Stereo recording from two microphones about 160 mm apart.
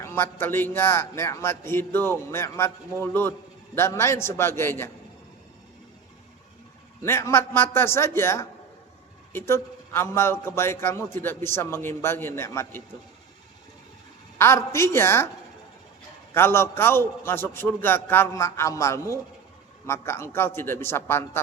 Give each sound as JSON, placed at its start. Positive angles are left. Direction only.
{"t": 0.0, "sound": "a man's voice", "side_deg": 15}
{"t": 7.0, "sound": "a man's voice", "side_deg": 15}
{"t": 14.3, "sound": "a man's voice", "side_deg": 15}
{"t": 16.3, "sound": "a man's voice", "side_deg": 15}